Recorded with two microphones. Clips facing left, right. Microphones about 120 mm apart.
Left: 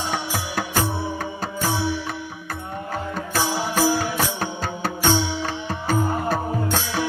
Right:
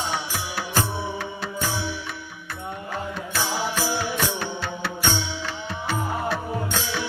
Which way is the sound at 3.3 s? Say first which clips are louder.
Left 4 dB; 45° left (ahead or behind).